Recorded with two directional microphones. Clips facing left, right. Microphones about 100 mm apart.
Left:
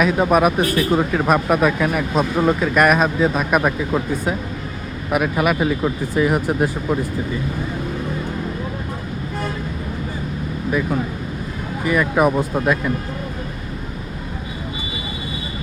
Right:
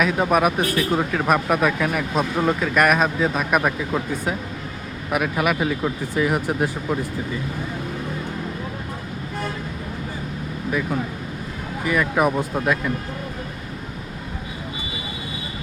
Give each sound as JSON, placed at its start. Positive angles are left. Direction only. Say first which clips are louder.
{"t": 0.0, "sound": "speech", "louder": "left 3 dB", "side_deg": 20}
{"t": 5.1, "sound": "speech", "louder": "left 3 dB", "side_deg": 30}
{"t": 11.9, "sound": "speech", "louder": "left 3 dB", "side_deg": 25}